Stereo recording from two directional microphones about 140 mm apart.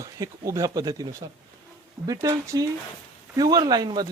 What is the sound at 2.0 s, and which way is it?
Speech, 25° right (ahead or behind).